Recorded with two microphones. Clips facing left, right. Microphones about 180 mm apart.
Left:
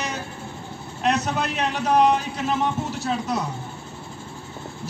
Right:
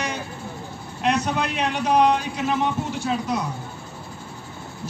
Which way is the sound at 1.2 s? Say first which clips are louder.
Right 1 dB; 5° left (ahead or behind).